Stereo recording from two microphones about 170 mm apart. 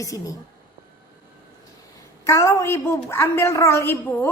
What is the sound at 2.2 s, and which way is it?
A woman's voice, 15° left (ahead or behind).